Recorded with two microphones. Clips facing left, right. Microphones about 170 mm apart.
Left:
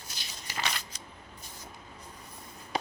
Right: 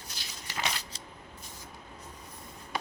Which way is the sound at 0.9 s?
30° right (ahead or behind).